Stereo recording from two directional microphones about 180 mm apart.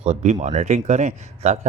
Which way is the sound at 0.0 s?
40° right (ahead or behind).